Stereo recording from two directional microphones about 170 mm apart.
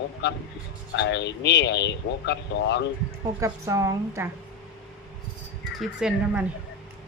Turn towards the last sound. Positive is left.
turn(degrees=0)  # may be behind; listen again after turning